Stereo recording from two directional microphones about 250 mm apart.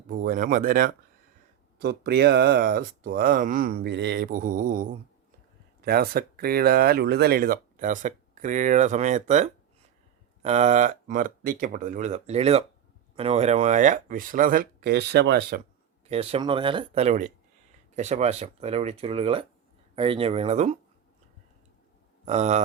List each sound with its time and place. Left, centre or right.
0.1 s speech: right
16.0 s speech: right
22.3 s speech: right